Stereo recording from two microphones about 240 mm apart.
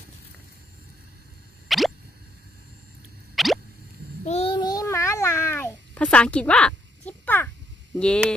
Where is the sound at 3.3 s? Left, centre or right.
Centre.